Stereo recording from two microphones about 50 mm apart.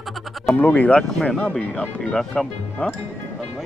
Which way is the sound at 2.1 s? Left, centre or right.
Centre.